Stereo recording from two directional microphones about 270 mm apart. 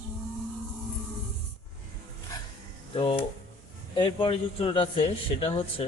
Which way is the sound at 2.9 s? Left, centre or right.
Centre.